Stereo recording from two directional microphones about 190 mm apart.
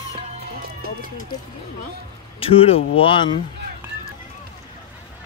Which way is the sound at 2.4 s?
30° left (ahead or behind).